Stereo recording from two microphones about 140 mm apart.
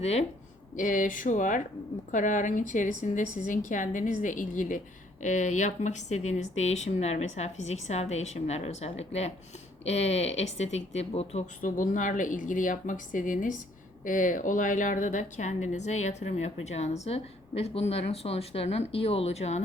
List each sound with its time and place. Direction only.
0.0 s a woman's voice: 50° left (ahead or behind)
0.8 s a woman's voice: 70° left (ahead or behind); by 11.4 s 45° left (ahead or behind)
11.6 s a woman's voice: 70° left (ahead or behind); by 19.6 s 50° left (ahead or behind)